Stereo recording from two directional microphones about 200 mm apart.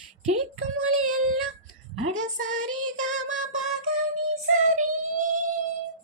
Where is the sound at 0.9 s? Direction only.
90° right.